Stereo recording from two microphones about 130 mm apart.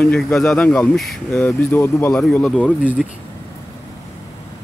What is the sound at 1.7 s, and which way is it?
Speech, 20° left (ahead or behind).